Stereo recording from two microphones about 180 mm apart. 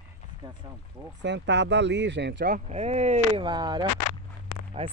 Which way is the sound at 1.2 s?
75° right (ahead or behind).